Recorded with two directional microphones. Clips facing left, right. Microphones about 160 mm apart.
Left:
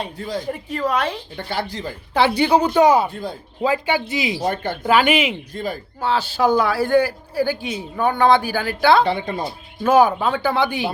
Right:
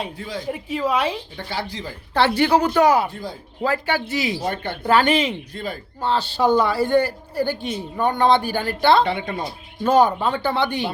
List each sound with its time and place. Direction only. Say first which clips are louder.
0.2 s speech: left 4 dB; 40° left (ahead or behind)
0.4 s a woman's voice: right 3 dB; 5° right (ahead or behind)
1.5 s speech: left 4 dB; 55° left (ahead or behind)
2.1 s speech: left 1 dB; 15° left (ahead or behind)
3.1 s speech: left 3 dB; 60° left (ahead or behind)
3.6 s speech: left 2 dB; 15° left (ahead or behind)
4.4 s speech: left 3 dB; 40° left (ahead or behind)
4.8 s speech: even; 10° left (ahead or behind)
5.5 s speech: left 3 dB; 40° left (ahead or behind)
6.0 s a man's voice: left 1 dB; 5° left (ahead or behind)
9.0 s speech: left 2 dB; 35° left (ahead or behind)
9.8 s speech: left 2 dB; 5° left (ahead or behind)